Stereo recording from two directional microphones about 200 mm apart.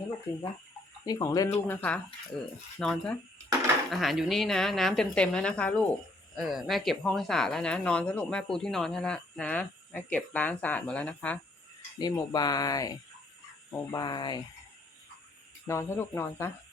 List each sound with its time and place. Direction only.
0.3 s speech: 15° left (ahead or behind)
11.9 s speech: 20° left (ahead or behind)
15.6 s speech: 15° left (ahead or behind)